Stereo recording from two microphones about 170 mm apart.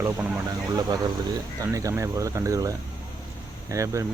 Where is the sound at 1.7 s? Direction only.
20° right (ahead or behind).